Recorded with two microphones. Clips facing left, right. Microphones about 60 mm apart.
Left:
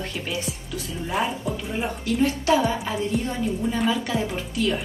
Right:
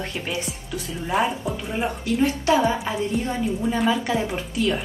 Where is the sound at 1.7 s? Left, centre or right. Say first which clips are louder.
Right 2 dB; centre.